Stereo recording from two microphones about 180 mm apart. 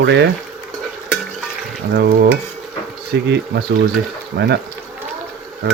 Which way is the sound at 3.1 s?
70° right (ahead or behind).